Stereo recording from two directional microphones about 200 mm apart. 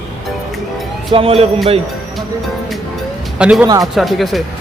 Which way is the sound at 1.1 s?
30° right (ahead or behind).